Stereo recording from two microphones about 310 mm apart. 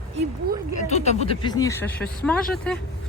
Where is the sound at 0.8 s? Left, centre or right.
Left; by 2.8 s centre.